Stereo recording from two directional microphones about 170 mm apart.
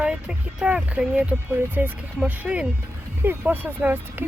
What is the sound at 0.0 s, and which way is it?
Speech, 5° right (ahead or behind).